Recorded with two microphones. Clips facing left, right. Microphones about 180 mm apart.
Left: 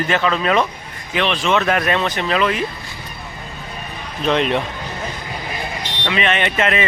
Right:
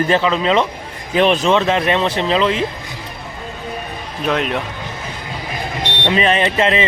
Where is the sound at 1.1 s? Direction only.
45° right (ahead or behind).